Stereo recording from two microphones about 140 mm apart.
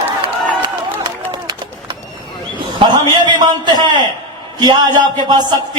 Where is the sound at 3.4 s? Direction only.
30° right (ahead or behind).